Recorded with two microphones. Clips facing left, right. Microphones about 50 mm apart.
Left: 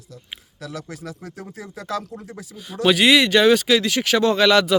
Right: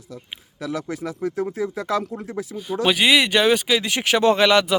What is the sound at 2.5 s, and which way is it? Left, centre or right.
Speech, centre.